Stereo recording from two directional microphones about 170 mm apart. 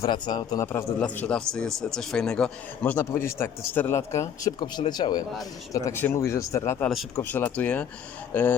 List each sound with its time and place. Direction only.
0.0 s a man's voice: 25° left (ahead or behind)
0.7 s a man's voice: 10° left (ahead or behind)